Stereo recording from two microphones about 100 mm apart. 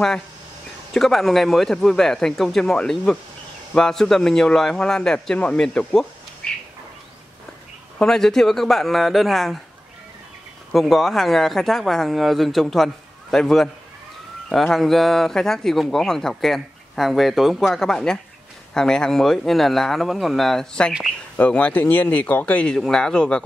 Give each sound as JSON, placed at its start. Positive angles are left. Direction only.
{"t": 0.9, "sound": "a man's voice", "side_deg": 0}
{"t": 8.0, "sound": "a man's voice", "side_deg": 5}
{"t": 10.7, "sound": "a man's voice", "side_deg": 0}